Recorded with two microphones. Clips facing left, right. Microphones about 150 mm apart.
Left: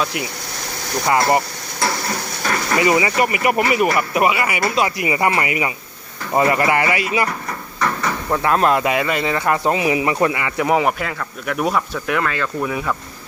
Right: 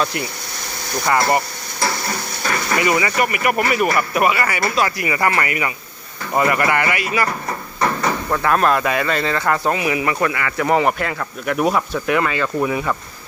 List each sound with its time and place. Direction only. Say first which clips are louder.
0.0 s speech: right 1 dB; 10° left (ahead or behind)
1.0 s speech: left 1 dB; 20° left (ahead or behind)
2.7 s speech: left 2 dB; 25° left (ahead or behind)
8.3 s speech: left 1 dB; 20° left (ahead or behind)
10.7 s speech: right 1 dB; 5° left (ahead or behind)